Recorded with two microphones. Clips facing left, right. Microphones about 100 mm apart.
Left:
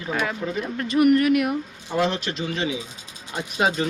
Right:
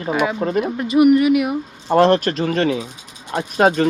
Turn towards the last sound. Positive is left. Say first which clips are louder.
# right 7 dB
turn(degrees=-50)  # may be behind; listen again after turning